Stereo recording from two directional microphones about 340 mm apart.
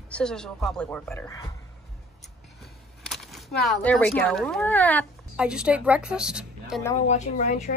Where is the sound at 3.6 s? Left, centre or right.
Centre.